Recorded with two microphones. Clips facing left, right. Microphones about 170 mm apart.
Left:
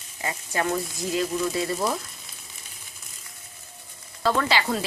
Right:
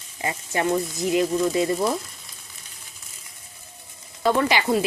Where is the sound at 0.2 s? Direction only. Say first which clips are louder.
Right 3 dB; 25° right (ahead or behind).